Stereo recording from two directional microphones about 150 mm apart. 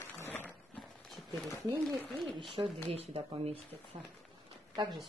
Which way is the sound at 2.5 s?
40° right (ahead or behind).